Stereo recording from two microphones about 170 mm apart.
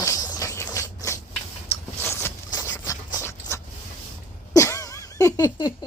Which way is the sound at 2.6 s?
20° left (ahead or behind).